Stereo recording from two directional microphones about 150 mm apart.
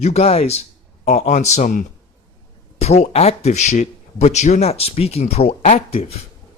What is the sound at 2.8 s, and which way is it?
Speech, 45° left (ahead or behind).